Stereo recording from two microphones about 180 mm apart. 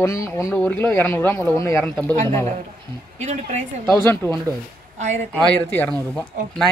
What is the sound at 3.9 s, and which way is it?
Speech, 15° left (ahead or behind).